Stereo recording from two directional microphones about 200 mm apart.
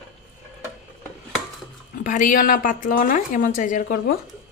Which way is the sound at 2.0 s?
40° left (ahead or behind).